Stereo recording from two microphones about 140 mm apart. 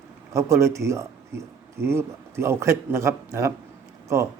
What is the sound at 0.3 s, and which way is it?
Speech, 20° right (ahead or behind).